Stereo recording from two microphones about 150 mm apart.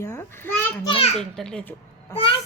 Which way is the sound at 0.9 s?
40° left (ahead or behind).